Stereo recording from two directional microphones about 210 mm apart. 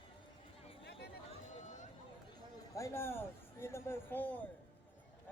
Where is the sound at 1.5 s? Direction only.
35° left (ahead or behind).